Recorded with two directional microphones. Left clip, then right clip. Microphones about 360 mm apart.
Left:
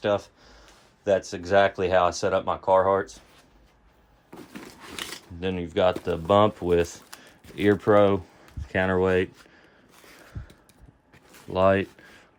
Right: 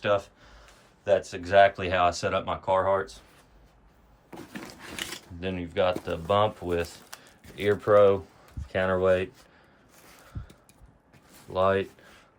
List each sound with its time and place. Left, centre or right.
0.0 s speech: centre
4.3 s a sound: centre
5.4 s speech: centre
11.5 s speech: left